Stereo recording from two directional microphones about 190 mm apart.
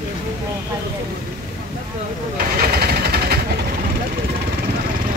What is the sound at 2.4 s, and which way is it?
Vehicle, 50° right (ahead or behind).